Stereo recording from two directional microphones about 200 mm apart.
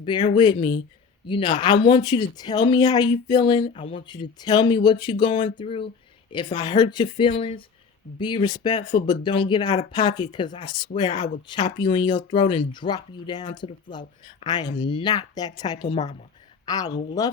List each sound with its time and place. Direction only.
0.0 s speech: 25° left (ahead or behind)